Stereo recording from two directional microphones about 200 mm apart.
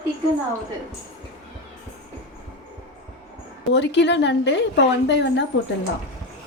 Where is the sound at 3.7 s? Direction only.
60° left (ahead or behind).